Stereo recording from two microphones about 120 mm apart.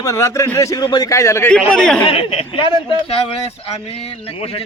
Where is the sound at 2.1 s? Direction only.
50° left (ahead or behind).